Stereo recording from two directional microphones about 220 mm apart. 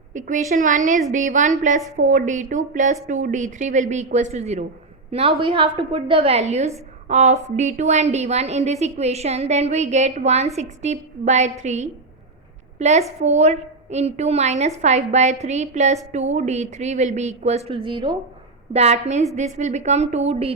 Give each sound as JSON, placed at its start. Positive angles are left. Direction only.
{"t": 0.1, "sound": "a woman's voice", "side_deg": -35}